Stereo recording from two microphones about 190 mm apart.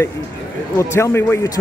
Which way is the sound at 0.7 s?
15° left (ahead or behind).